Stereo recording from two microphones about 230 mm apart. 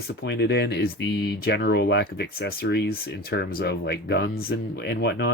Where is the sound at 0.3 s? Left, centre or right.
Left.